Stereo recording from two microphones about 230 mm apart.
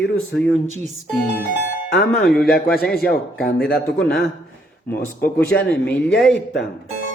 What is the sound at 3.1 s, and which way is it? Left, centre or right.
Speech, left.